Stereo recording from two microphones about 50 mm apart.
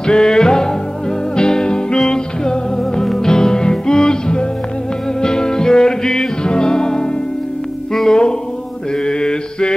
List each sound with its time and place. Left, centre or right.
0.0 s music: centre
8.9 s mantra: centre